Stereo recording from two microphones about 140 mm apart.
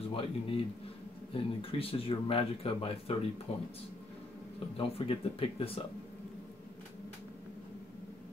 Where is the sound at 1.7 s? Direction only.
40° left (ahead or behind).